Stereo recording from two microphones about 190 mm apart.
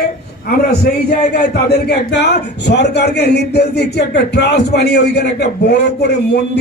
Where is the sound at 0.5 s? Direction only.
55° left (ahead or behind).